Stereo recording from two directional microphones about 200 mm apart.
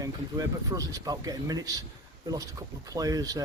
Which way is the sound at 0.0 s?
20° right (ahead or behind).